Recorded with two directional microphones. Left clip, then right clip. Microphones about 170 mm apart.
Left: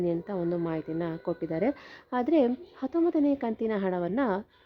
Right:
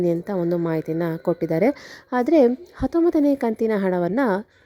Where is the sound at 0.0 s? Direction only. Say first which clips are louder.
Right 7 dB; 40° right (ahead or behind).